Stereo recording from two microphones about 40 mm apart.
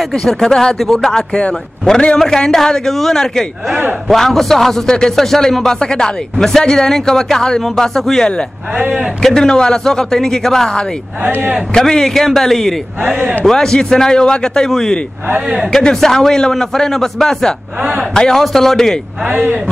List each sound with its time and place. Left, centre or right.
0.2 s a man's voice: centre
0.7 s a man's voice: centre
5.7 s a man's voice: centre
13.0 s a man's voice: right
13.5 s a man's voice: centre
19.3 s a man's voice: right